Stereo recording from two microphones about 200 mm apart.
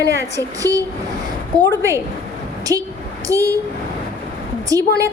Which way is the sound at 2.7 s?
15° right (ahead or behind).